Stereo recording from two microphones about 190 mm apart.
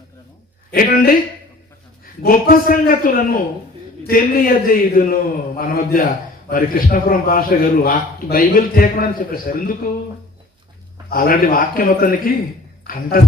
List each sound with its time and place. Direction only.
0.7 s a man's voice: 50° left (ahead or behind)
2.2 s a man's voice: 50° left (ahead or behind)
11.1 s a man's voice: 50° left (ahead or behind)